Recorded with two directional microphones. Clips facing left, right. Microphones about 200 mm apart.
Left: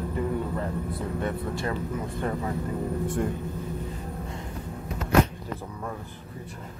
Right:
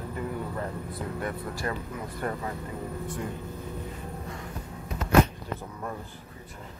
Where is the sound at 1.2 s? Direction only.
25° left (ahead or behind).